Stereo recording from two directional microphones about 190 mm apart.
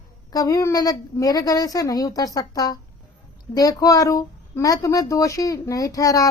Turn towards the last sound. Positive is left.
turn(degrees=15)  # may be behind; listen again after turning